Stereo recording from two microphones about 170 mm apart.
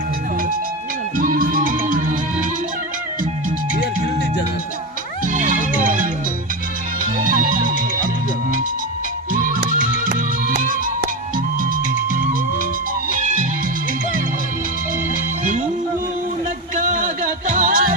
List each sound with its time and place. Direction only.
1.1 s music: 55° right (ahead or behind)
5.3 s music: 50° right (ahead or behind)
7.3 s music: 50° right (ahead or behind)
13.1 s music: 50° right (ahead or behind)
15.4 s music: 45° right (ahead or behind)
16.7 s music: 50° right (ahead or behind)